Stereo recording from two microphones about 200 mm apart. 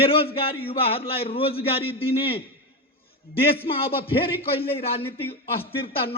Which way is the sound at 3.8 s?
25° left (ahead or behind).